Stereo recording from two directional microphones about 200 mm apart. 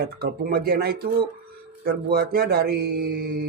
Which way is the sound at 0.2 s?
50° right (ahead or behind).